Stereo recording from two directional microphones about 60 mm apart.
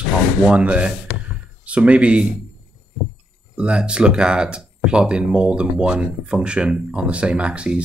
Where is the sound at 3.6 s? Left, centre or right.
Centre.